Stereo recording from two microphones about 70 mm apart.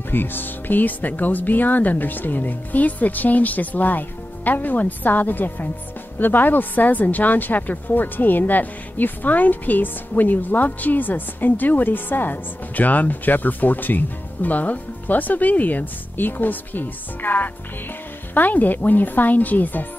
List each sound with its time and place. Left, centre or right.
0.1 s a woman's voice: left